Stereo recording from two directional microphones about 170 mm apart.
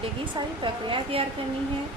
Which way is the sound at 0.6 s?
30° right (ahead or behind).